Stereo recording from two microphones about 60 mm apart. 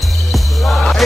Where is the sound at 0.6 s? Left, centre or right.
Centre.